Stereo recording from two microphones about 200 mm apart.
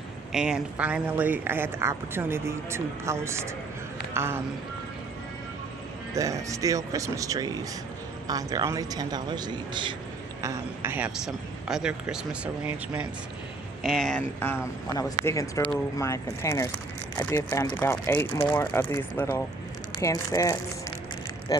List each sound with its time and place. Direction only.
0.3 s speech: 5° right (ahead or behind)
6.1 s a man's voice: 15° right (ahead or behind)
10.4 s speech: 10° right (ahead or behind); by 21.7 s 20° left (ahead or behind)